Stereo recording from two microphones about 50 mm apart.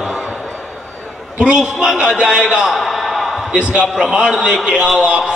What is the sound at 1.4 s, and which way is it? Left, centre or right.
A man's voice, centre.